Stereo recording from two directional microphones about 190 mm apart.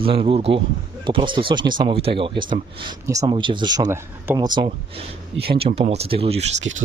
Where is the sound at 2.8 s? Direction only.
20° right (ahead or behind).